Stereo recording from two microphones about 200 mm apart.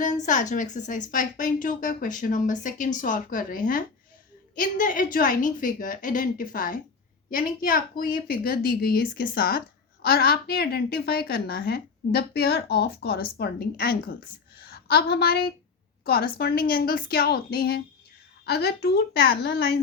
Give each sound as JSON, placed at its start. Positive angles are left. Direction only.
{"t": 0.0, "sound": "a woman's voice", "side_deg": 40}